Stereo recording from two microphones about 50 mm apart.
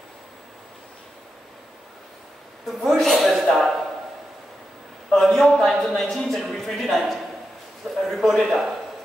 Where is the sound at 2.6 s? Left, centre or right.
Centre.